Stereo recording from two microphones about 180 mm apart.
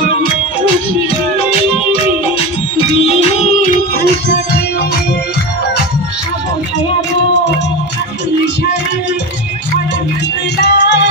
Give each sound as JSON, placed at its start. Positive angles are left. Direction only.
{"t": 3.2, "sound": "music", "side_deg": 35}
{"t": 10.6, "sound": "music", "side_deg": 70}